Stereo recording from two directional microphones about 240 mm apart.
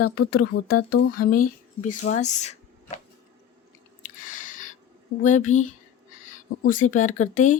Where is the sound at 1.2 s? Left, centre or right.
Left.